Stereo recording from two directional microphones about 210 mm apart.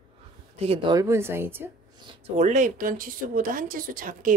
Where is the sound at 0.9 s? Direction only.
15° right (ahead or behind).